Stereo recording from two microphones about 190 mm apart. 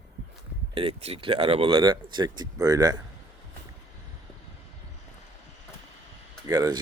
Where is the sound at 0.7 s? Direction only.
30° right (ahead or behind).